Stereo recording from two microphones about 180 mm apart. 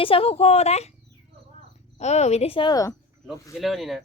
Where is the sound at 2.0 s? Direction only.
40° left (ahead or behind); by 2.9 s 20° left (ahead or behind).